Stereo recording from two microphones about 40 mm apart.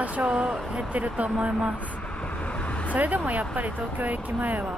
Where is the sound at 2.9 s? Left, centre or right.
Right.